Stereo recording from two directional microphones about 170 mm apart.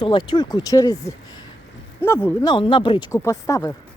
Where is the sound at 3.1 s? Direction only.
20° left (ahead or behind).